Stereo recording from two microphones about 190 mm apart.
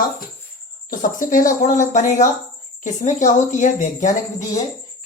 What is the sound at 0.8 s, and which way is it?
A woman's voice, 45° left (ahead or behind).